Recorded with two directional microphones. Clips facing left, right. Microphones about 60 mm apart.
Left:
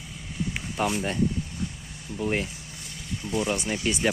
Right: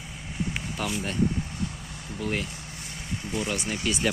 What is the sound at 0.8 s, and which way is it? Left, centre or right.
Speech, left.